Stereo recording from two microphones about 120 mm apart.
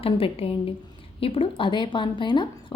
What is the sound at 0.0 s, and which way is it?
A woman's voice, 50° left (ahead or behind).